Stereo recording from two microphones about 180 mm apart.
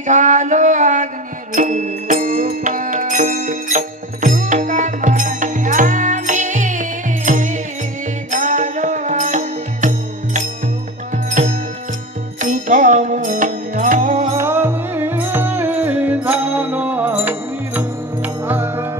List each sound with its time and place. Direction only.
0.0 s a sound: 45° right (ahead or behind)
1.5 s music: 45° right (ahead or behind)
14.3 s music: 15° right (ahead or behind)